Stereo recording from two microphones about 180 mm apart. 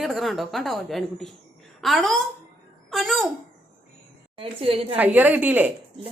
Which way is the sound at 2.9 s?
Centre (ahead or behind).